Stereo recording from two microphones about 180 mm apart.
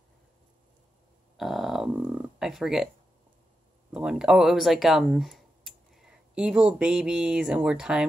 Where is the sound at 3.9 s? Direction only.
5° right (ahead or behind).